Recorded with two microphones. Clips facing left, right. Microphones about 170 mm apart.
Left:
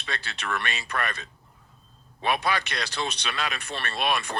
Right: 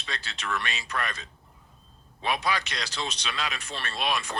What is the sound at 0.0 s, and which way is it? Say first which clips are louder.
Speech: left 2 dB; 60° left (ahead or behind).